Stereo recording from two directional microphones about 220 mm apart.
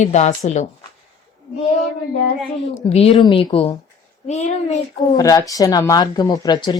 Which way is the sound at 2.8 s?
25° left (ahead or behind).